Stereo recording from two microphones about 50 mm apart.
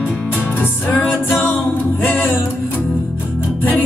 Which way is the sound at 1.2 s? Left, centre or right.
Left.